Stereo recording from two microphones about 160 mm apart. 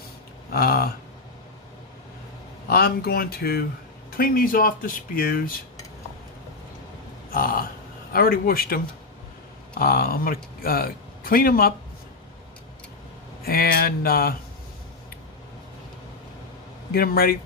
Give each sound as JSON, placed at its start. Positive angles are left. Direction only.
{"t": 0.5, "sound": "speech", "side_deg": 70}
{"t": 2.6, "sound": "speech", "side_deg": 75}
{"t": 4.2, "sound": "speech", "side_deg": 65}
{"t": 7.3, "sound": "speech", "side_deg": 65}
{"t": 13.4, "sound": "speech", "side_deg": 70}
{"t": 16.9, "sound": "speech", "side_deg": 70}